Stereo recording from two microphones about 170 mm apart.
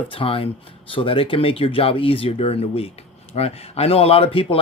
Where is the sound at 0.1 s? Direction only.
30° left (ahead or behind).